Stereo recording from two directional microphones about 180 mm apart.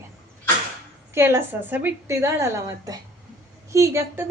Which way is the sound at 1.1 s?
15° right (ahead or behind).